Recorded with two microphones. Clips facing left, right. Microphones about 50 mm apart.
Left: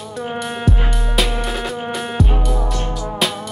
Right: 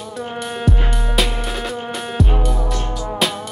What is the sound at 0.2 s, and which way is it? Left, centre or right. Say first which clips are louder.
Music: left 1 dB; centre.